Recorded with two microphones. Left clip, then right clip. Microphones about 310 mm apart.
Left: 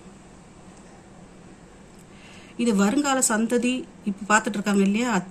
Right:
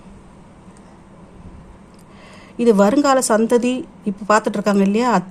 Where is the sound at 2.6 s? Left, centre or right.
Centre.